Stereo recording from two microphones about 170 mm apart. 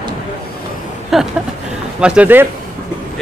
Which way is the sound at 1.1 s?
Centre (ahead or behind).